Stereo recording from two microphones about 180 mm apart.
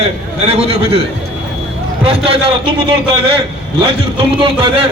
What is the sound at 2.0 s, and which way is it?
Speech, 30° right (ahead or behind).